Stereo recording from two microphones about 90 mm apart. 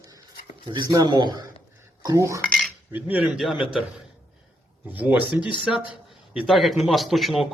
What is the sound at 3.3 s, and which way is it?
Speech, 5° right (ahead or behind).